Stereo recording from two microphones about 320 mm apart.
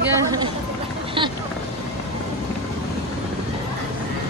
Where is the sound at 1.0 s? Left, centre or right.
Centre.